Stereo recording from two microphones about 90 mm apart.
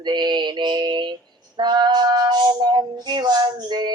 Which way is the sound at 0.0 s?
55° right (ahead or behind).